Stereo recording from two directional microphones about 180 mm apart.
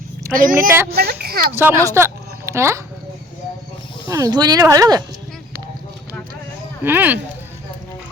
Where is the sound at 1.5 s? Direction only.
15° right (ahead or behind).